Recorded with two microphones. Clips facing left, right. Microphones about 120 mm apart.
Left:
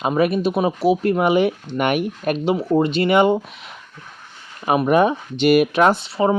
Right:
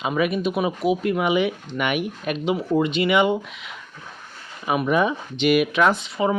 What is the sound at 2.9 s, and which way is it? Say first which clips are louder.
Speech: left 5 dB; 40° left (ahead or behind).